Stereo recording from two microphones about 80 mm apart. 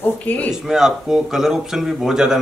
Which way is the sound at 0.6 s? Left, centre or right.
Centre.